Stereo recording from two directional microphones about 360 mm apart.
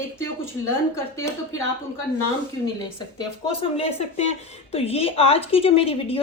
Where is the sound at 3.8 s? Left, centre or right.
Centre.